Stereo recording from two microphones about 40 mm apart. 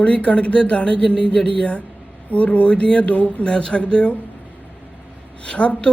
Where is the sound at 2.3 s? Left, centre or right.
Left.